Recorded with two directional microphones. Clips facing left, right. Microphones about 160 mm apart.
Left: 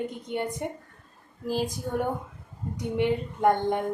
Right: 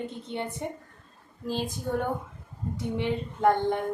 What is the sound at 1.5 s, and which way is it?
Speech, 10° left (ahead or behind).